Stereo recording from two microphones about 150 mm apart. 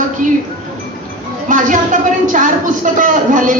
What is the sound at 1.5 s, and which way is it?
A woman's voice, 60° right (ahead or behind).